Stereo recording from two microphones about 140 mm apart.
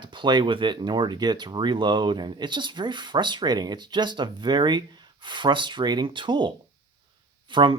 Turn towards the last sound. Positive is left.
turn(degrees=-35)  # may be behind; listen again after turning